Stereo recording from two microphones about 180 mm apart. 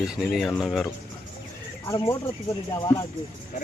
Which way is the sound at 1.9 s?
20° left (ahead or behind).